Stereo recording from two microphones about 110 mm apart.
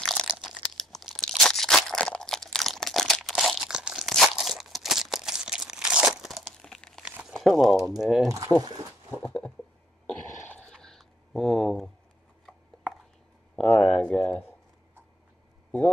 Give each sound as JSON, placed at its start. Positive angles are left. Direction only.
{"t": 0.0, "sound": "crunch", "side_deg": 5}
{"t": 0.3, "sound": "crumpling", "side_deg": 0}
{"t": 7.0, "sound": "crumpling", "side_deg": -10}
{"t": 7.3, "sound": "speech", "side_deg": 0}
{"t": 8.3, "sound": "speech", "side_deg": -35}
{"t": 9.2, "sound": "a sound", "side_deg": 10}
{"t": 13.6, "sound": "a sound", "side_deg": 15}